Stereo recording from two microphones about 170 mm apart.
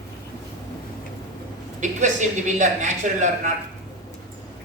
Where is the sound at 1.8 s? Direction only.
45° right (ahead or behind).